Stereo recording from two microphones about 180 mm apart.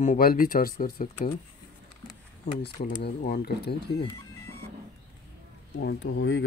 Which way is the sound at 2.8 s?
60° left (ahead or behind).